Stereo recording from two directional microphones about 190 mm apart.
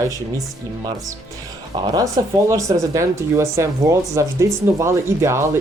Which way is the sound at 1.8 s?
20° right (ahead or behind).